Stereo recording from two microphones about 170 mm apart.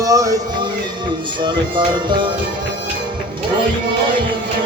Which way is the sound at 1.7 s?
25° right (ahead or behind).